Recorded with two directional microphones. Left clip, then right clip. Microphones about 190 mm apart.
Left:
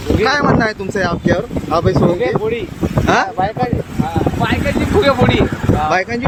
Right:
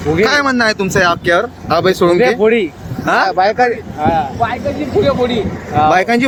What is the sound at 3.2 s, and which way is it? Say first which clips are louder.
Speech: right 6 dB; 40° right (ahead or behind).